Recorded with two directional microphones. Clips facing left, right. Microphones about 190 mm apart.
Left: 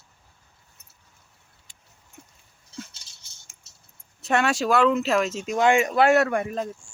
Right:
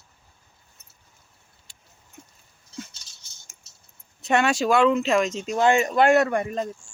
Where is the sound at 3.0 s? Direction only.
30° left (ahead or behind).